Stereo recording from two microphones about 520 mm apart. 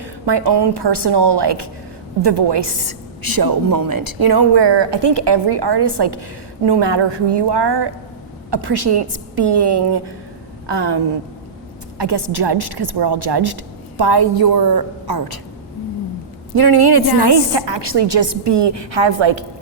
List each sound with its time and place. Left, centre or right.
0.0 s a woman's voice: right
16.6 s a woman's voice: right